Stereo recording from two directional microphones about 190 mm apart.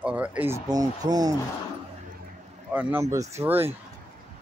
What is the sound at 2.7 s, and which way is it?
Speech, 10° right (ahead or behind).